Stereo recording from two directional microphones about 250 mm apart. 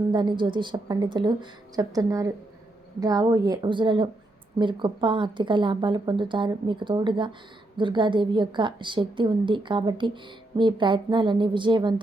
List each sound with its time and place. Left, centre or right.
0.1 s a woman's voice: centre